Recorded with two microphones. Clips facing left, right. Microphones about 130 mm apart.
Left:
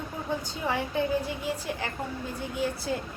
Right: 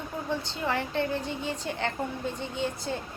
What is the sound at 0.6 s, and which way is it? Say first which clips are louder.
A woman's voice: left 1 dB; 10° left (ahead or behind).